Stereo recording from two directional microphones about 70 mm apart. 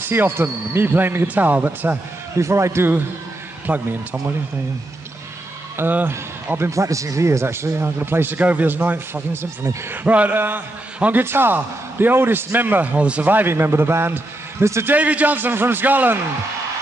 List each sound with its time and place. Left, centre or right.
0.0 s a man's voice: right
2.3 s a man's voice: right
5.8 s a man's voice: right
10.0 s a man's voice: right
14.9 s a man's voice: centre